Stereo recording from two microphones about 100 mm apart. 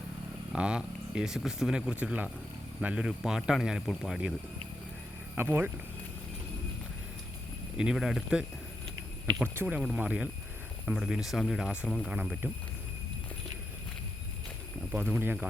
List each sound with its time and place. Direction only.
0.5 s speech: 10° right (ahead or behind)
5.4 s speech: 20° right (ahead or behind)
7.8 s speech: 5° right (ahead or behind)
10.9 s speech: centre (ahead or behind)
14.9 s speech: 20° right (ahead or behind)